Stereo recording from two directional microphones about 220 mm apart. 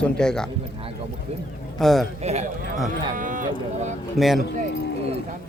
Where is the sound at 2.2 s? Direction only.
30° right (ahead or behind).